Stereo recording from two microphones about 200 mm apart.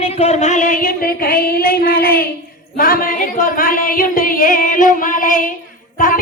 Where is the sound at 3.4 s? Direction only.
45° left (ahead or behind).